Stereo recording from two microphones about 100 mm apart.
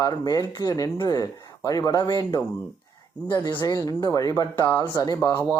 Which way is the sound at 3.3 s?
45° left (ahead or behind).